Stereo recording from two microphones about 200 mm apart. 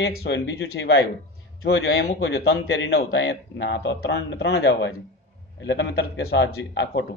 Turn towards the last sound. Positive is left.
turn(degrees=60)  # may be behind; listen again after turning